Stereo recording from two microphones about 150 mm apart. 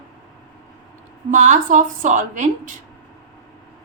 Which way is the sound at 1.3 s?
55° right (ahead or behind).